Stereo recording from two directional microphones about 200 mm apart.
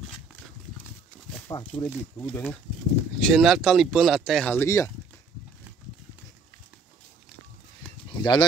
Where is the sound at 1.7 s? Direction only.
10° left (ahead or behind).